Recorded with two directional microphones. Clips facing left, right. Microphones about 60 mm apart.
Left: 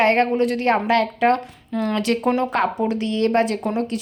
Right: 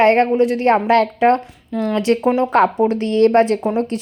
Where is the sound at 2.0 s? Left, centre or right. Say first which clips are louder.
Right 5 dB; right.